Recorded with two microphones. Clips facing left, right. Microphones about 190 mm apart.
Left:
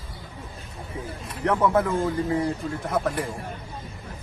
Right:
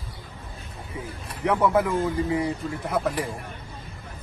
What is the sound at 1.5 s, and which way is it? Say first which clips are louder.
A man's voice: even; 5° right (ahead or behind).